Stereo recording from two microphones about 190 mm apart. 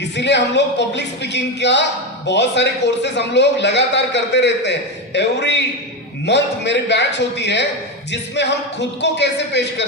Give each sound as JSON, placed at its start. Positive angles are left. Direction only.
{"t": 0.0, "sound": "a man's voice", "side_deg": 65}